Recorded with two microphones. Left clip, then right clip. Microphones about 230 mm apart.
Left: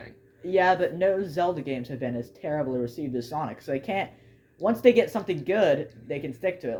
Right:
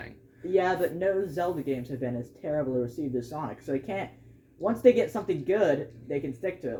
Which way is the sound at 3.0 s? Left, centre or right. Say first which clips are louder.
Left 2 dB; left.